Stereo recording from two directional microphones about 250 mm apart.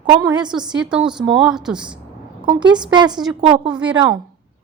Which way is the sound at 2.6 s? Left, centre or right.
Centre.